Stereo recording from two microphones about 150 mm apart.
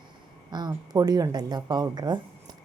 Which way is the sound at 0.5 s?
30° right (ahead or behind).